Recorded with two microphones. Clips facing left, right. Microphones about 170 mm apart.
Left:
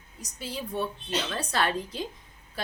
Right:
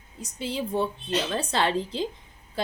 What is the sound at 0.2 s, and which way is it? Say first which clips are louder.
A woman's voice: right 6 dB; 25° right (ahead or behind).